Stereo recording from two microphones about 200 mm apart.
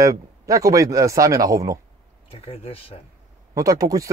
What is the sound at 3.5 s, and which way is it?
Speech, 15° right (ahead or behind).